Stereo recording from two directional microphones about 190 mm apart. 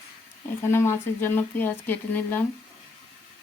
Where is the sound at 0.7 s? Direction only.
15° left (ahead or behind).